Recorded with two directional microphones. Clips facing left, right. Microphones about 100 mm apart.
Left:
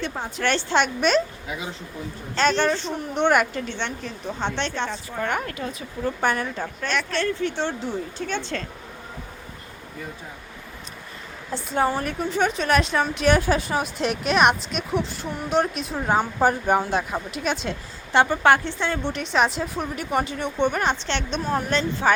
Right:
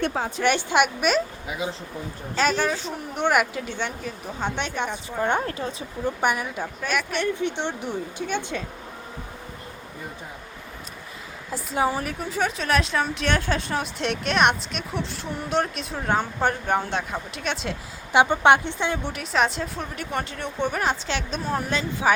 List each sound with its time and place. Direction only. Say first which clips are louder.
0.0 s a woman's voice: right 4 dB; 65° right (ahead or behind)
0.4 s speech: right 1 dB; 10° right (ahead or behind)
2.3 s a woman's voice: left 2 dB; 5° right (ahead or behind)
5.3 s a woman's voice: right 2 dB; 30° right (ahead or behind)
6.2 s speech: left 1 dB; 10° right (ahead or behind)
11.5 s a woman's voice: left 1 dB; 5° right (ahead or behind)
18.1 s a woman's voice: right 1 dB; 15° right (ahead or behind)